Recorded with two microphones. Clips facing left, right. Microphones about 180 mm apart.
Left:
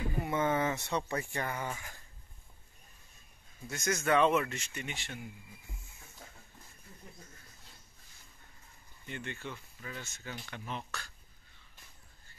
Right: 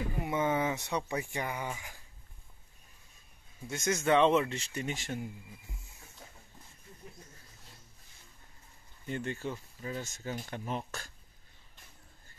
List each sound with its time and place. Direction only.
0.2 s speech: 15° right (ahead or behind)
3.6 s speech: 25° right (ahead or behind); by 5.2 s 45° right (ahead or behind)
9.0 s speech: 40° right (ahead or behind)